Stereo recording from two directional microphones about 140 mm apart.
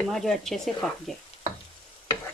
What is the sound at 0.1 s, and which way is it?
Speech, centre (ahead or behind).